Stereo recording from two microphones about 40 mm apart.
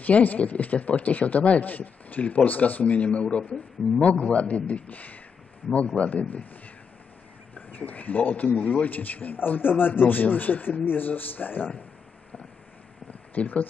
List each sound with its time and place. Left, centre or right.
0.0 s speech: left
1.6 s a man's voice: left
4.8 s a man's voice: left
5.7 s speech: left
6.2 s a man's voice: left
13.3 s speech: left